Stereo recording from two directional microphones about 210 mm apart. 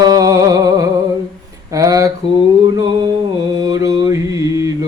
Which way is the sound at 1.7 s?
15° right (ahead or behind).